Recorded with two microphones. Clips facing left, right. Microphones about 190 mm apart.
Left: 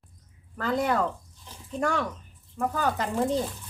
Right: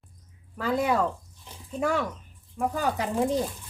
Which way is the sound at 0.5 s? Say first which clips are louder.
Right 1 dB; 10° right (ahead or behind).